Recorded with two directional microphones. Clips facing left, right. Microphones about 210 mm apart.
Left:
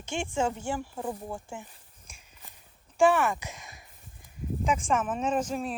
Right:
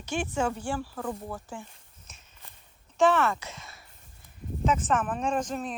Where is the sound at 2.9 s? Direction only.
15° left (ahead or behind).